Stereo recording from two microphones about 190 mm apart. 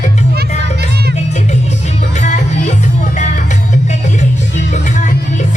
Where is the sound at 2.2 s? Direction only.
40° left (ahead or behind).